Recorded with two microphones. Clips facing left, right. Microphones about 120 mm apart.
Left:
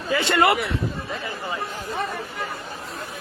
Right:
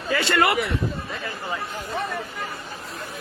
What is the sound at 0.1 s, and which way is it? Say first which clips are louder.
Speech: left 2 dB; 15° left (ahead or behind).